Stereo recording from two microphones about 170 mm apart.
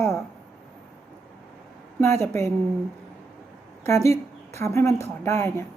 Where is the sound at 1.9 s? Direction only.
15° left (ahead or behind).